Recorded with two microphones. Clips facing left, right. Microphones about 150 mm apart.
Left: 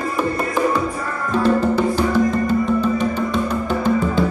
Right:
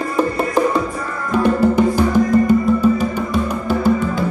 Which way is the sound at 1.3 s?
15° right (ahead or behind).